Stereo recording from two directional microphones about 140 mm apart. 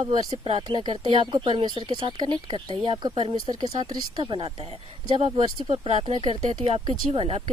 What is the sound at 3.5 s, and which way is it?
Speech, 30° right (ahead or behind).